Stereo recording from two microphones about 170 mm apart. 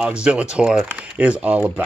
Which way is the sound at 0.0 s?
5° right (ahead or behind).